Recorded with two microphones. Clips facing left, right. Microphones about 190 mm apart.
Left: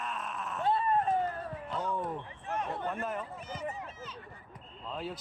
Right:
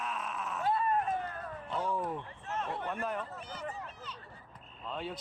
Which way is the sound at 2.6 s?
5° left (ahead or behind).